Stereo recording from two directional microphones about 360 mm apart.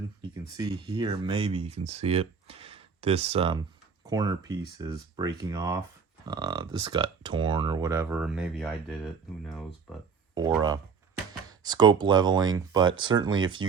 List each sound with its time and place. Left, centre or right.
0.5 s speech: centre
10.3 s speech: centre